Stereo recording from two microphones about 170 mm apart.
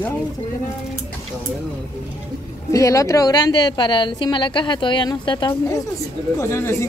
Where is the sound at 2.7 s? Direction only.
20° left (ahead or behind).